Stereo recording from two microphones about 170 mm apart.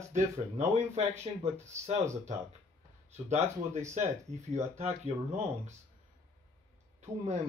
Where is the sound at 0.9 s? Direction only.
40° right (ahead or behind).